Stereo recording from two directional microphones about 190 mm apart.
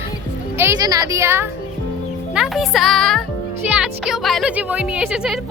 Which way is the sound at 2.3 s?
Centre (ahead or behind).